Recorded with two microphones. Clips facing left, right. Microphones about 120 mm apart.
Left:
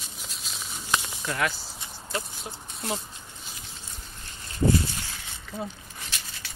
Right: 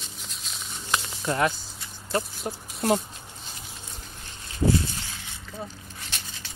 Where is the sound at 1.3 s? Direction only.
30° right (ahead or behind).